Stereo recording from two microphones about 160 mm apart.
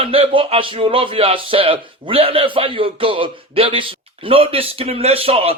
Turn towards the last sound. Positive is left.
turn(degrees=-35)  # may be behind; listen again after turning